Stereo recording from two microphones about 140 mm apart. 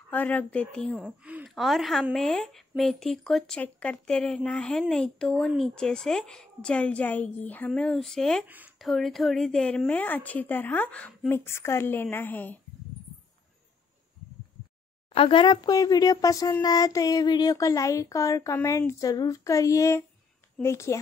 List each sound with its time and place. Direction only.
0.1 s speech: 10° left (ahead or behind)
8.5 s speech: 10° right (ahead or behind)
8.7 s a woman's voice: centre (ahead or behind)
15.1 s child singing: 40° left (ahead or behind); by 21.0 s 20° left (ahead or behind)